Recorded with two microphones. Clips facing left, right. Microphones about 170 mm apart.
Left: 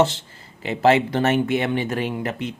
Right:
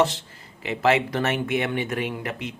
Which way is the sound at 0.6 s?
30° left (ahead or behind).